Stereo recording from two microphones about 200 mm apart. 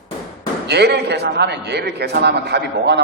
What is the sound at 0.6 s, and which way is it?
A man's voice, 55° right (ahead or behind).